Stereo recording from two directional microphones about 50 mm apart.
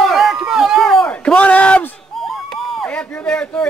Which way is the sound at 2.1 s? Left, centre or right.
Centre.